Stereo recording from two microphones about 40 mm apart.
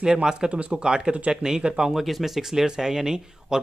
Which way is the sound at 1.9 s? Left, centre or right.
Centre.